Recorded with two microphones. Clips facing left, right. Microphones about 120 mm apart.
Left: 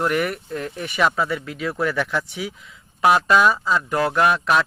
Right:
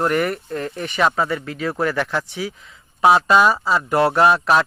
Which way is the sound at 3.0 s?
25° right (ahead or behind).